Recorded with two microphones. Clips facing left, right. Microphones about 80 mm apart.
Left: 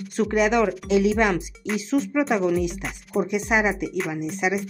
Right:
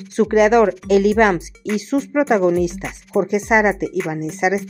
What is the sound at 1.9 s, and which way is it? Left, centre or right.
Speech, right.